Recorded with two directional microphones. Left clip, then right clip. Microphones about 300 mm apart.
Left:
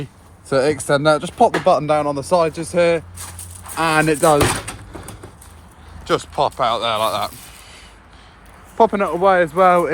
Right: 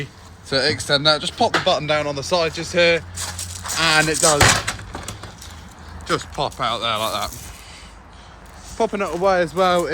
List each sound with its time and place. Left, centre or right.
0.5 s speech: left
6.1 s speech: centre
8.9 s speech: centre